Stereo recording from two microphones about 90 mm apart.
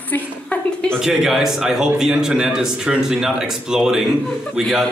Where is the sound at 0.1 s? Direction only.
15° left (ahead or behind).